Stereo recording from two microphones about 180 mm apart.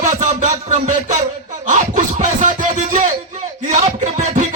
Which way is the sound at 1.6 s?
45° right (ahead or behind).